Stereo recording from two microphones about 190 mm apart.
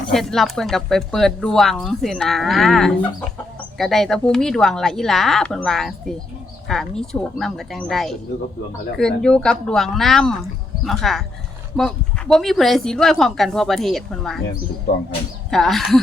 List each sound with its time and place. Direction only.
0.1 s speech: centre (ahead or behind)
15.4 s speech: centre (ahead or behind)